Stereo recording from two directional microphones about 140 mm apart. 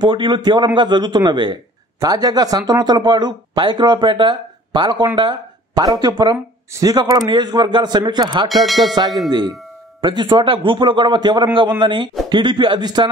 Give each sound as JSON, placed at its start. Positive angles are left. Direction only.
{"t": 0.0, "sound": "a man's voice", "side_deg": -35}
{"t": 8.5, "sound": "music", "side_deg": 0}
{"t": 9.3, "sound": "a man's voice", "side_deg": -30}